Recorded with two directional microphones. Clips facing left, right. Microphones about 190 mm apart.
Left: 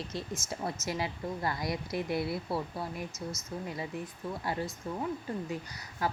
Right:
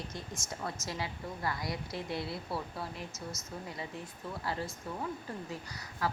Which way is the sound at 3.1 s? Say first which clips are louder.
Left 4 dB; centre (ahead or behind).